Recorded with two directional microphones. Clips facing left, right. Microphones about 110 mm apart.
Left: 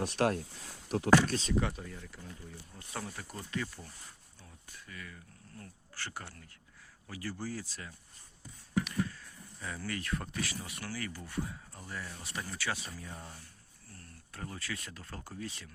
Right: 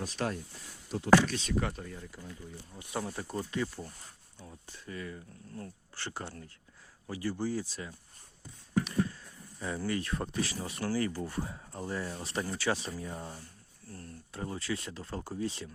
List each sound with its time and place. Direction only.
0.0 s speech: 65° left (ahead or behind)
1.3 s speech: 35° left (ahead or behind)
1.6 s speech: centre (ahead or behind)
2.7 s speech: 20° right (ahead or behind)
8.7 s speech: 30° right (ahead or behind)